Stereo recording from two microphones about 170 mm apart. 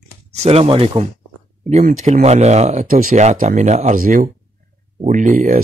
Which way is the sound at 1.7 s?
50° right (ahead or behind).